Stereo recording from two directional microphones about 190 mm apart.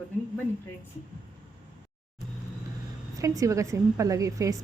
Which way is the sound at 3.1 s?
20° right (ahead or behind).